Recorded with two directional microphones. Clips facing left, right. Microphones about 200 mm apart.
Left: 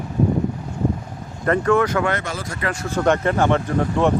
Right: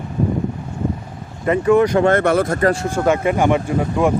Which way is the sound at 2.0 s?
50° right (ahead or behind).